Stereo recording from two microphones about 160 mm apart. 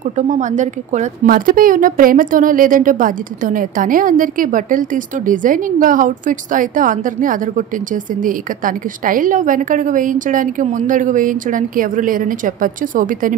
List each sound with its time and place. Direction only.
0.3 s a woman's voice: 50° right (ahead or behind)